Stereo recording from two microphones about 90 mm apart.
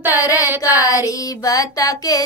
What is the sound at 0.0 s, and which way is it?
Child singing, 20° right (ahead or behind).